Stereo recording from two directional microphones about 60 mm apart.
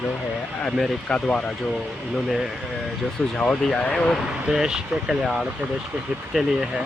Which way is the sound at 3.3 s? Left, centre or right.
Centre.